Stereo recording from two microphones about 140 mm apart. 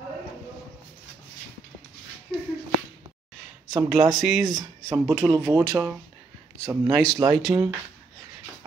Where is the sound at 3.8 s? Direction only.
Centre (ahead or behind).